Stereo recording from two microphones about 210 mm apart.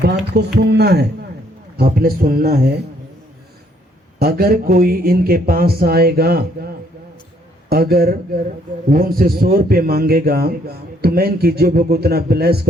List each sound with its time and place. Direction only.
0.3 s a man's voice: 50° right (ahead or behind)
4.2 s a man's voice: 45° right (ahead or behind)
7.7 s a man's voice: 45° right (ahead or behind)